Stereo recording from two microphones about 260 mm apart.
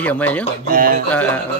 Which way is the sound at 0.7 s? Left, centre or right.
Right.